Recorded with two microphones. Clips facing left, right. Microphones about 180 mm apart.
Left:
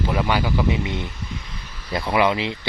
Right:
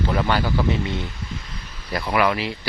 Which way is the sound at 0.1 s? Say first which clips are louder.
Even; 10° left (ahead or behind).